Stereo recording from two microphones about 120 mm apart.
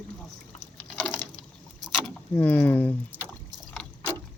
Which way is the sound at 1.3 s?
35° right (ahead or behind).